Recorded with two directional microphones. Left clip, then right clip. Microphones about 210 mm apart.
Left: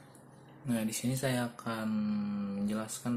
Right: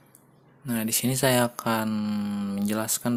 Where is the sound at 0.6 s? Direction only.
45° right (ahead or behind).